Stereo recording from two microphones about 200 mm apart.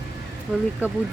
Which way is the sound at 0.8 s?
10° right (ahead or behind).